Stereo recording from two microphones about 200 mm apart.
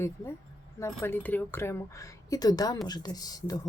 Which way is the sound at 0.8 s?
10° left (ahead or behind).